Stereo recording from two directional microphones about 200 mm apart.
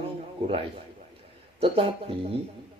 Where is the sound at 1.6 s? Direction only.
25° right (ahead or behind).